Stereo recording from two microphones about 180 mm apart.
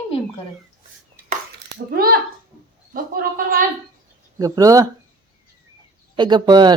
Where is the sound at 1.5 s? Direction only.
60° right (ahead or behind).